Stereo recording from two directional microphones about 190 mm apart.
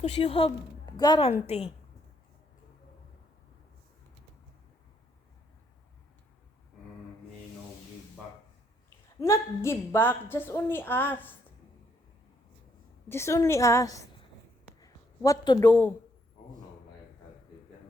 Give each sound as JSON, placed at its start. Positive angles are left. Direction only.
{"t": 0.0, "sound": "a woman's voice", "side_deg": 30}
{"t": 9.2, "sound": "a woman's voice", "side_deg": 15}
{"t": 13.1, "sound": "a woman's voice", "side_deg": 15}
{"t": 14.8, "sound": "a sound", "side_deg": 20}